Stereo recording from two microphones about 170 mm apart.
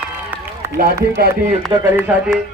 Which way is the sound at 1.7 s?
25° right (ahead or behind).